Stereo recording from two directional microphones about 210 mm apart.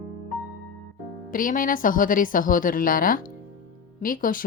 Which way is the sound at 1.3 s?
40° left (ahead or behind).